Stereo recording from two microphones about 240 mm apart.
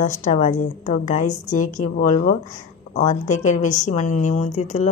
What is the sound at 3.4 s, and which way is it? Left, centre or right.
A woman's voice, left.